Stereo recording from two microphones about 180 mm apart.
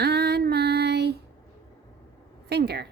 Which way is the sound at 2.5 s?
65° right (ahead or behind).